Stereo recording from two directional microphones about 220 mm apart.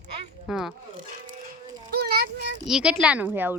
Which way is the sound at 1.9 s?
45° right (ahead or behind).